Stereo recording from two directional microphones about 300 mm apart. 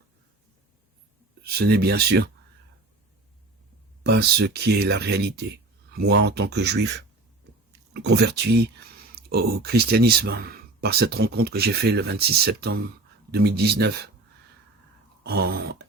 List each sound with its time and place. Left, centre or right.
1.5 s speech: right
4.0 s speech: right
15.2 s speech: right